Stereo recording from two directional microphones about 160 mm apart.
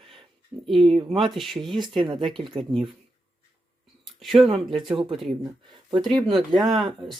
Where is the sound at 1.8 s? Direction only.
30° right (ahead or behind).